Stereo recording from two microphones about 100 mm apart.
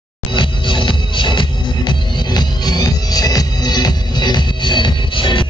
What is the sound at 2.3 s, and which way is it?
Music, 40° left (ahead or behind).